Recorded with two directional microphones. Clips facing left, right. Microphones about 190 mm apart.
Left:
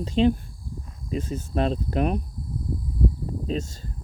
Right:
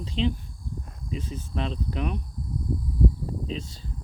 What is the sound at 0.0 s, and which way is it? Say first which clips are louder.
Speech: left 7 dB; 45° left (ahead or behind).